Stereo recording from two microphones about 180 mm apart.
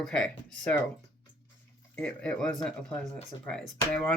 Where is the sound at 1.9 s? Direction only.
5° left (ahead or behind).